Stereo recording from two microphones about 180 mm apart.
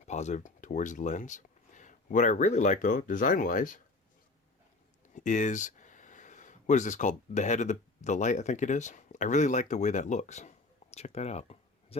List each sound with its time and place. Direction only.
0.0 s speech: 40° left (ahead or behind)
5.1 s speech: 45° left (ahead or behind)
10.9 s a sound: 35° left (ahead or behind)